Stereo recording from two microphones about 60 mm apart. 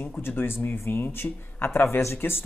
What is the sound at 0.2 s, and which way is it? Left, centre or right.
Speech, left.